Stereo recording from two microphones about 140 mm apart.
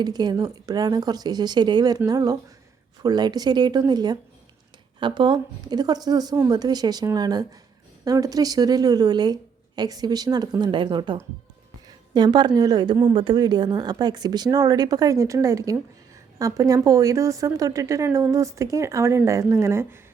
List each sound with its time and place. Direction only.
0.0 s a woman's voice: 30° right (ahead or behind)
11.9 s a sound: 30° right (ahead or behind)
12.5 s a woman's voice: 30° right (ahead or behind)